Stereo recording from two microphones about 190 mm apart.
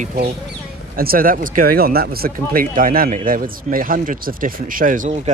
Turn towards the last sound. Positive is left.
turn(degrees=-40)  # may be behind; listen again after turning